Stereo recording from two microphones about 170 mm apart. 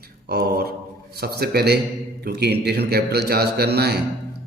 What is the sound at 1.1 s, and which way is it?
A man's voice, 65° right (ahead or behind).